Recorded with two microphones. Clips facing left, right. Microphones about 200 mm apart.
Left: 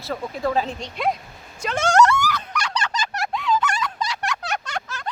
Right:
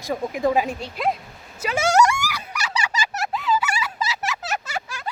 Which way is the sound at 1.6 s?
5° right (ahead or behind).